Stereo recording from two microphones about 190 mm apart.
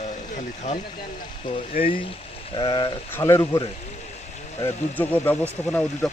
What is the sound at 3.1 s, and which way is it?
A man's voice, 15° left (ahead or behind).